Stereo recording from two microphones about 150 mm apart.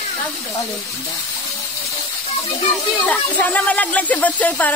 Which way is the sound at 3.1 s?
10° left (ahead or behind).